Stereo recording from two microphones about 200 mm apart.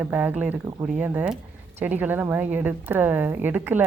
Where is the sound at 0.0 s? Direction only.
5° right (ahead or behind).